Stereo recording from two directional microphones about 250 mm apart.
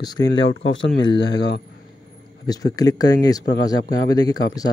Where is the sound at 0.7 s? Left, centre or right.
Left.